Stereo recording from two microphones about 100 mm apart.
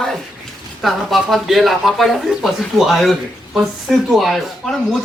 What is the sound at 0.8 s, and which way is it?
Speech, centre (ahead or behind).